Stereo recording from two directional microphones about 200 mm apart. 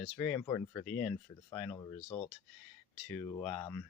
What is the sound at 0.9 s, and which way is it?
Speech, 5° left (ahead or behind).